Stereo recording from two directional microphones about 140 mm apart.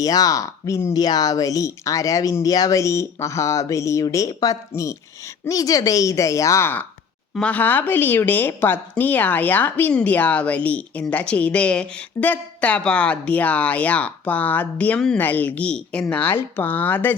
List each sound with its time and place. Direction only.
0.0 s speech: 25° left (ahead or behind)